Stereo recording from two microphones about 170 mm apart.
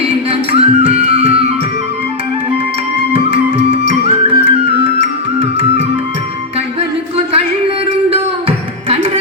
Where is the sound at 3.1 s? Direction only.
35° right (ahead or behind).